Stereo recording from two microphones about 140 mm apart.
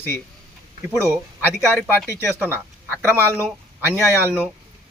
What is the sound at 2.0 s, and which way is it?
Speech, 15° right (ahead or behind).